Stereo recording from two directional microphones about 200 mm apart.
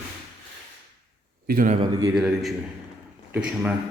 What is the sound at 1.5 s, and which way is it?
Speech, 45° right (ahead or behind).